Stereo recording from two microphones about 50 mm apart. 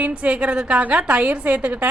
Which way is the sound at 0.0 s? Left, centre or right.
Right.